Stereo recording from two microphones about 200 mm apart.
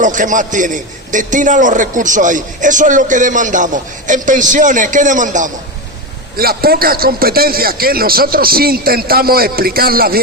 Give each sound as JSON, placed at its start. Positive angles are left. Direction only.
{"t": 0.0, "sound": "a man's voice", "side_deg": -40}